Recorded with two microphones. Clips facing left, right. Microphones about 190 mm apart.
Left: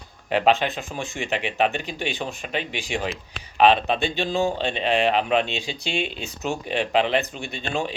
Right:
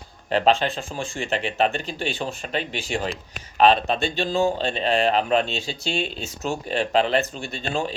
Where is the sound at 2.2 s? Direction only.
Centre (ahead or behind).